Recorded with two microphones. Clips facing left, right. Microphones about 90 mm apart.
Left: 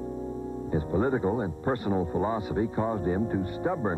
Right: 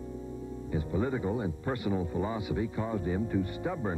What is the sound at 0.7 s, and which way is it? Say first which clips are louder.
Speech: left 5 dB; 40° left (ahead or behind).